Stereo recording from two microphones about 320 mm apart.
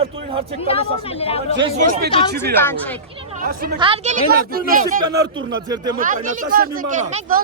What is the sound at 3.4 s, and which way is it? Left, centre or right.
Speech, right.